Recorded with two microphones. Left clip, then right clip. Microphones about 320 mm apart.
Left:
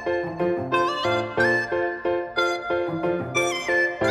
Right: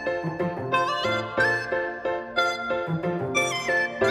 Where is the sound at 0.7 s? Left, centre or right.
Centre.